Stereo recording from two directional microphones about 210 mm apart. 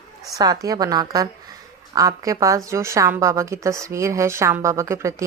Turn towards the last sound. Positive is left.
turn(degrees=-15)  # may be behind; listen again after turning